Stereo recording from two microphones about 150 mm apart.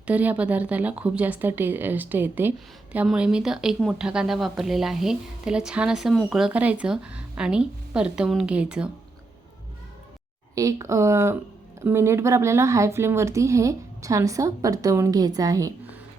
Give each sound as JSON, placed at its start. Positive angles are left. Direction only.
{"t": 0.1, "sound": "a woman's voice", "side_deg": -10}
{"t": 10.5, "sound": "speech", "side_deg": -20}